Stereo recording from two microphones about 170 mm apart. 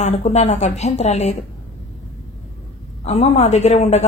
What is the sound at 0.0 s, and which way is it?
A woman's voice, 40° left (ahead or behind).